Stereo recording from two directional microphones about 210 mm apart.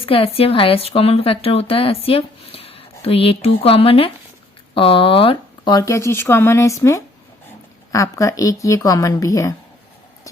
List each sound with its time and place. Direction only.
0.0 s speech: 25° left (ahead or behind)